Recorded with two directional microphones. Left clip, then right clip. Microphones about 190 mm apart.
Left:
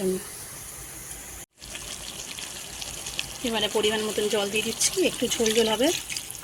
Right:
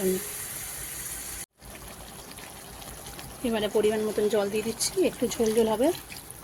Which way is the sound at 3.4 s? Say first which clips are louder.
Even; 10° right (ahead or behind).